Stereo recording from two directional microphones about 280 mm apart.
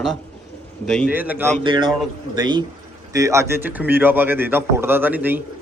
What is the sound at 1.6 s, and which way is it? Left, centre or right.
A man's voice, centre.